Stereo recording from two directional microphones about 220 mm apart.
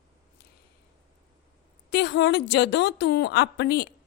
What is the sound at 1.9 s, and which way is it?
A woman's voice, 50° left (ahead or behind).